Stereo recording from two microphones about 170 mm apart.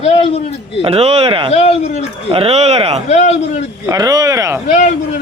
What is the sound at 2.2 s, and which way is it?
Speech, 35° right (ahead or behind).